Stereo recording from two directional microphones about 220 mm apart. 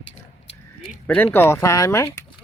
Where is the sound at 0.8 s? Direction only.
5° left (ahead or behind).